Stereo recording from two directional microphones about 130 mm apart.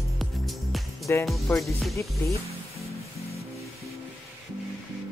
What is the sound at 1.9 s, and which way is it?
Speech, 25° left (ahead or behind).